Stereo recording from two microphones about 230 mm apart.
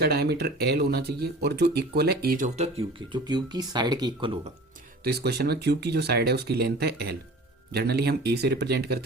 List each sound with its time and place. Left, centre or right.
0.0 s speech: right; by 4.4 s centre
5.0 s speech: right